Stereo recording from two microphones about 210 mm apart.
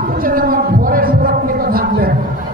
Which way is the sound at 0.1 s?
45° right (ahead or behind).